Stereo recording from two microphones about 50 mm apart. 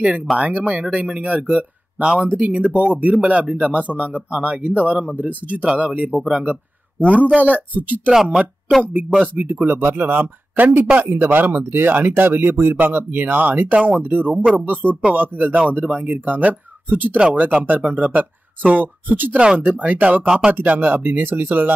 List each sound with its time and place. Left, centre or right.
0.4 s speech: right
6.1 s speech: centre
6.4 s a man's voice: right
8.1 s speech: centre
9.3 s speech: right
19.3 s speech: right